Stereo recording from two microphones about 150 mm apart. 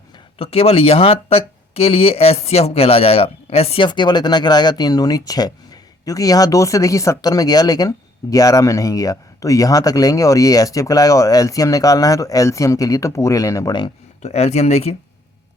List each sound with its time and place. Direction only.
0.3 s speech: 40° left (ahead or behind)
14.2 s speech: 45° left (ahead or behind)